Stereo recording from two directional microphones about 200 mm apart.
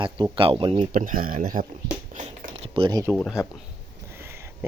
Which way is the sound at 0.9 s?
40° right (ahead or behind).